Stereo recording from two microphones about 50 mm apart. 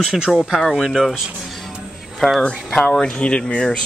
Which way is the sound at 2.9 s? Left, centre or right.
Centre.